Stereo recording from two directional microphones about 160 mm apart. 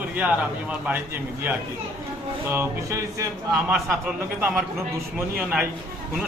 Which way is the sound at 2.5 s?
15° right (ahead or behind).